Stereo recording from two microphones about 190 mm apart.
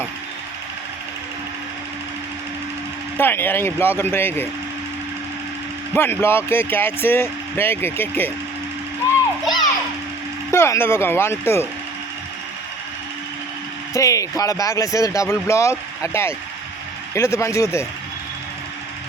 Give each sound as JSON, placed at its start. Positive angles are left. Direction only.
{"t": 3.2, "sound": "speech", "side_deg": 10}
{"t": 5.9, "sound": "speech", "side_deg": 10}
{"t": 9.5, "sound": "children playing", "side_deg": 20}
{"t": 10.5, "sound": "speech", "side_deg": 15}
{"t": 13.9, "sound": "speech", "side_deg": 15}